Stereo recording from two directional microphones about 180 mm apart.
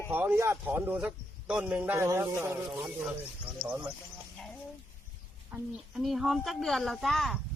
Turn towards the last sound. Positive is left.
turn(degrees=0)  # may be behind; listen again after turning